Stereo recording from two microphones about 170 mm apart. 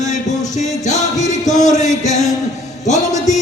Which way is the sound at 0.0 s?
45° left (ahead or behind).